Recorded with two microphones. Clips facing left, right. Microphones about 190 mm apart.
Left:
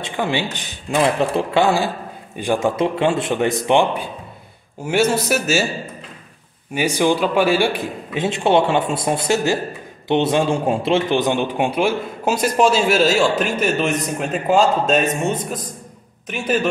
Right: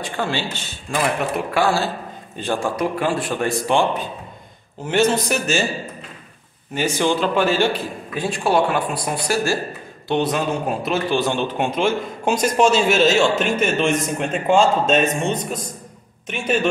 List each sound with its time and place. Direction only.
0.0 s a man's voice: 15° left (ahead or behind)
4.8 s a man's voice: 10° left (ahead or behind)
6.7 s a man's voice: 10° left (ahead or behind)
8.1 s a man's voice: 20° left (ahead or behind); by 16.6 s centre (ahead or behind)